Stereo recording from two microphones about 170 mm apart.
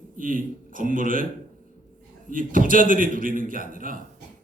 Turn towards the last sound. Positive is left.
turn(degrees=-55)  # may be behind; listen again after turning